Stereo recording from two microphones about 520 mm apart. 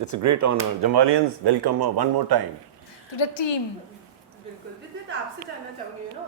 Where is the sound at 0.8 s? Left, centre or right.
Right.